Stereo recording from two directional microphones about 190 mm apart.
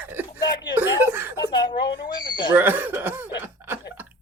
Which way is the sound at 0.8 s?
10° right (ahead or behind).